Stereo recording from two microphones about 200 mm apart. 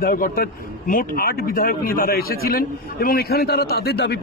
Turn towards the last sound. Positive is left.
turn(degrees=55)  # may be behind; listen again after turning